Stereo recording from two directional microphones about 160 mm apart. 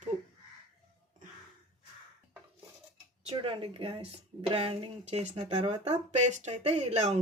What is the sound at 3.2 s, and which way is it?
Speech, 35° right (ahead or behind).